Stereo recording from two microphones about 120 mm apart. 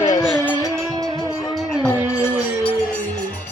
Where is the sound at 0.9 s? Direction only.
35° right (ahead or behind).